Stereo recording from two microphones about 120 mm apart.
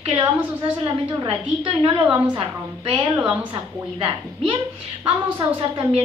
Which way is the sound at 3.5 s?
50° right (ahead or behind).